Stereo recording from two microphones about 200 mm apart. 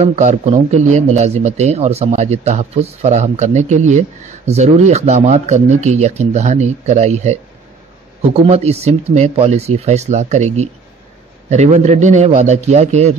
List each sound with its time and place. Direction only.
0.0 s speech: 35° right (ahead or behind)